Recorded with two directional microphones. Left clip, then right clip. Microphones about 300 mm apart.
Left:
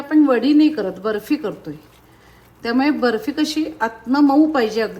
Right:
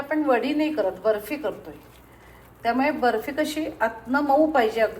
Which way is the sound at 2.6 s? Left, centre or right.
Left.